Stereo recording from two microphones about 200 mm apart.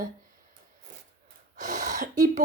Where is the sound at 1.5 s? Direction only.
40° right (ahead or behind).